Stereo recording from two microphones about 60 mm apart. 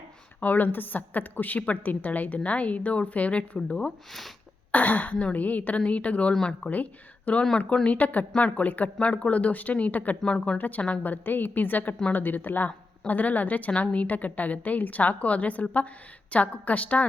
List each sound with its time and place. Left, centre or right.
0.3 s a woman's voice: left
3.8 s speech: centre
4.7 s a woman's voice: left
6.3 s speech: centre
7.3 s a woman's voice: left